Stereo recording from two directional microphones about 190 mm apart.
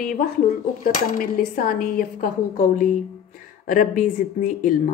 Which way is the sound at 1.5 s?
50° left (ahead or behind).